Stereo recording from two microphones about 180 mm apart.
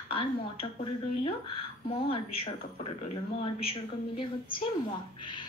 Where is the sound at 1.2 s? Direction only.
30° left (ahead or behind).